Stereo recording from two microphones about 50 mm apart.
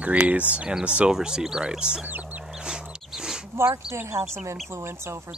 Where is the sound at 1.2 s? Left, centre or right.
Centre.